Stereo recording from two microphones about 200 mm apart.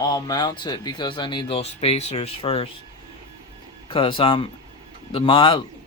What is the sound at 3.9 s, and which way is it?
Speech, 25° left (ahead or behind).